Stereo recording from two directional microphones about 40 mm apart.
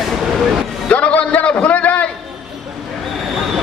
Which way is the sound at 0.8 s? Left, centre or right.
Left.